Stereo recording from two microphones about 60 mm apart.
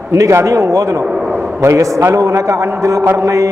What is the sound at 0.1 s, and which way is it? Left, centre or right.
A man's voice, right.